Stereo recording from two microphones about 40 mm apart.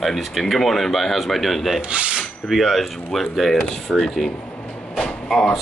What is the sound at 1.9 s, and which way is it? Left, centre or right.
Speech, right.